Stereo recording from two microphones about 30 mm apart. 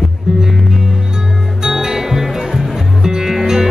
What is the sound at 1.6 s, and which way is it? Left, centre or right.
Music, right.